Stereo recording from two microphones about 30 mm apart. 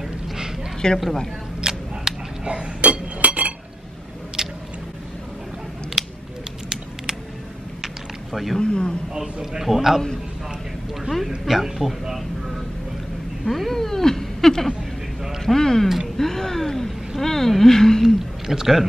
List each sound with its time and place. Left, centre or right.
0.8 s a man's voice: left
1.6 s a sound: right
2.4 s chink: right
4.4 s squish: centre
7.8 s a sound: centre
8.5 s a man's voice: left
9.1 s a man's voice: right
9.6 s speech: centre
11.1 s speech: centre
13.5 s cat: centre
15.4 s speech: centre
18.0 s speech: centre